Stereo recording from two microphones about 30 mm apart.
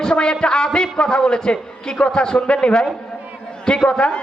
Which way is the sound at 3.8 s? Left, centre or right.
Left.